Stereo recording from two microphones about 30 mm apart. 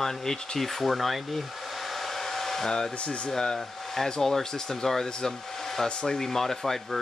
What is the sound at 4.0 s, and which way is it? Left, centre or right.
Speech, centre.